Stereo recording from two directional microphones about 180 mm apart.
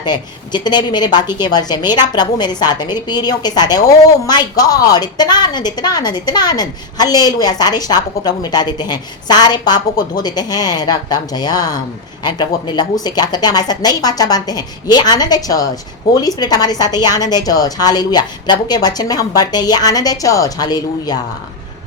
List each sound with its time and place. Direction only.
0.0 s a woman's voice: 25° left (ahead or behind)